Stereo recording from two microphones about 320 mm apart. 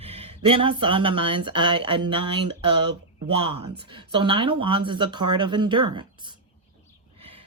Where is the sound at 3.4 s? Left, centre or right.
Centre.